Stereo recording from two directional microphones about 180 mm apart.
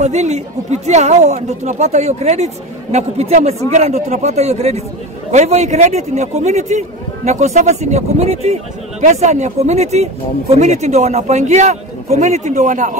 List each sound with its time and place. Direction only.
0.0 s speech: 40° right (ahead or behind)